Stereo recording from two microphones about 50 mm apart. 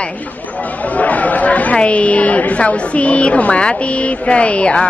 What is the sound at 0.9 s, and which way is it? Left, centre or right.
A woman's voice, left.